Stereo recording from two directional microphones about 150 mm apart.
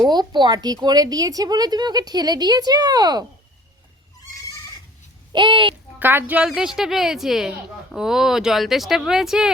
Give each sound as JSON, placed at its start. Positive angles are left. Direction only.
{"t": 0.1, "sound": "speech", "side_deg": -30}
{"t": 4.3, "sound": "goat", "side_deg": 20}
{"t": 5.3, "sound": "speech", "side_deg": -30}
{"t": 6.0, "sound": "a woman's voice", "side_deg": -10}